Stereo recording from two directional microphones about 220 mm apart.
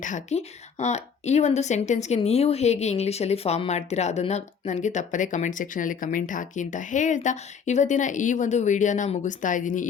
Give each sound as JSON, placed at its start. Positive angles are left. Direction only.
{"t": 0.0, "sound": "speech", "side_deg": 35}